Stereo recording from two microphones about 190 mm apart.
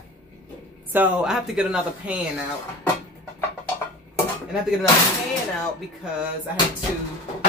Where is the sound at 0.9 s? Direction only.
5° right (ahead or behind).